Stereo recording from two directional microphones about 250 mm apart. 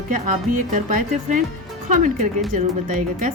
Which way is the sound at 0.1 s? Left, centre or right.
Right.